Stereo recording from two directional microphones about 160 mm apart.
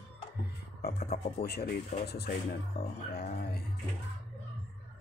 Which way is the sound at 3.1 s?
75° left (ahead or behind).